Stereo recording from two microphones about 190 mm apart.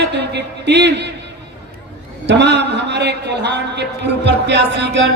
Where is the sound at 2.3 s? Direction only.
65° right (ahead or behind).